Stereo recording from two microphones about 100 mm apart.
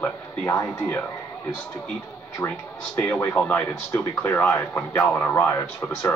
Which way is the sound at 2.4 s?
25° left (ahead or behind).